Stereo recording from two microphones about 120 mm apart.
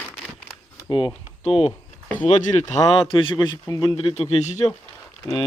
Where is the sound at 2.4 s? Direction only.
80° left.